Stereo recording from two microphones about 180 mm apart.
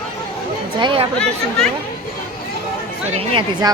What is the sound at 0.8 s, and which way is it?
Speech, 30° right (ahead or behind).